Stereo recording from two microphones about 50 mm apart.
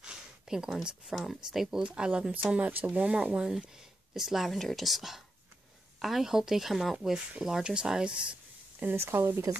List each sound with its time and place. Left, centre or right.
0.5 s speech: centre
1.8 s speech: right
8.9 s speech: right